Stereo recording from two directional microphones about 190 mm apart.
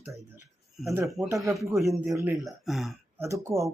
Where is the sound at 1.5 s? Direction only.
15° right (ahead or behind).